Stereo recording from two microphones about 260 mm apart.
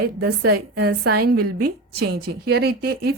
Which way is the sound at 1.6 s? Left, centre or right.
Right.